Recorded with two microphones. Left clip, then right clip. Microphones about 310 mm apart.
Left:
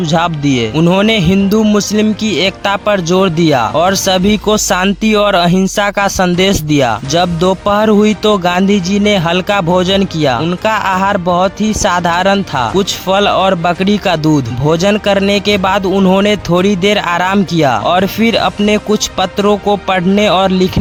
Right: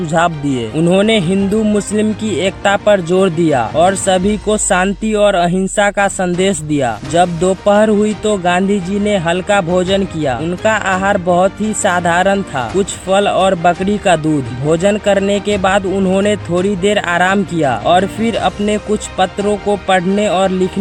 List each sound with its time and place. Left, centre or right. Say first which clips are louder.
0.1 s speech: left 1 dB; left